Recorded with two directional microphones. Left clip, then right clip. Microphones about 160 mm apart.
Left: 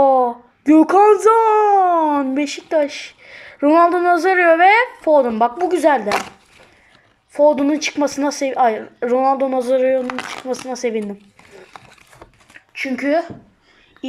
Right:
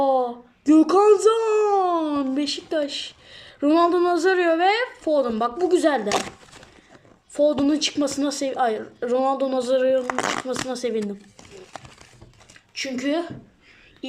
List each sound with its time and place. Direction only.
0.0 s a woman's voice: 25° right (ahead or behind)
7.3 s a woman's voice: 30° right (ahead or behind)
10.1 s speech: 40° right (ahead or behind)
10.7 s a woman's voice: 25° right (ahead or behind)
12.7 s a woman's voice: 20° right (ahead or behind)